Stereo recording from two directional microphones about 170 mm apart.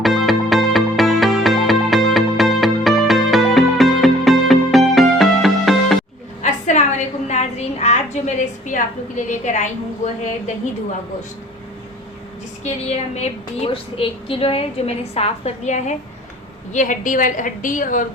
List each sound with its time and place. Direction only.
0.0 s music: centre (ahead or behind)
6.4 s a sound: 45° left (ahead or behind)
8.6 s a woman's voice: 50° left (ahead or behind)
12.6 s a woman's voice: 40° left (ahead or behind)